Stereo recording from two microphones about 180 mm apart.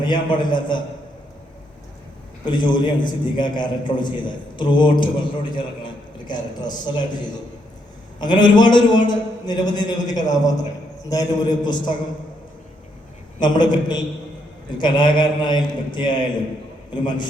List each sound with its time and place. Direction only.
0.0 s a man's voice: 25° left (ahead or behind)
2.4 s a man's voice: 25° left (ahead or behind)
8.2 s a man's voice: 25° left (ahead or behind)
13.4 s a man's voice: 25° left (ahead or behind)
16.9 s a man's voice: 25° left (ahead or behind)